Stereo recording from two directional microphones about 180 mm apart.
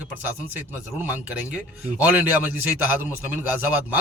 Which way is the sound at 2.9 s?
10° right (ahead or behind).